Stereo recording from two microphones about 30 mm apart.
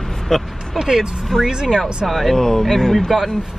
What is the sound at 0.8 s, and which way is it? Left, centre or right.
Speech, centre.